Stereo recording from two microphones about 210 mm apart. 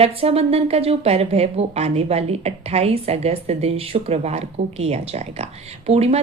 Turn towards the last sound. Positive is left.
turn(degrees=-30)  # may be behind; listen again after turning